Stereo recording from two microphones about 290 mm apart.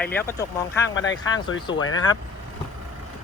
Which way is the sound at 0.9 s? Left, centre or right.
Left.